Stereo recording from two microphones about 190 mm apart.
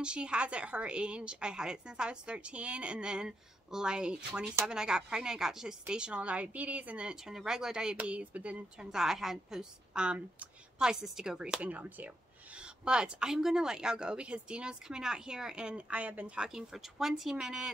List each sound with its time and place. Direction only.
0.0 s a woman's voice: 5° right (ahead or behind)